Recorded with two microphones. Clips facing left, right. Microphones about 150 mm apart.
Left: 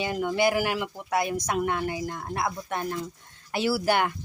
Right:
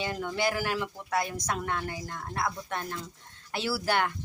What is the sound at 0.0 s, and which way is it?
Speech, 10° left (ahead or behind).